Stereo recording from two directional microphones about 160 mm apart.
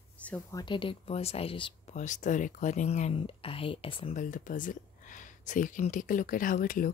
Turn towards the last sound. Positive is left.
turn(degrees=60)  # may be behind; listen again after turning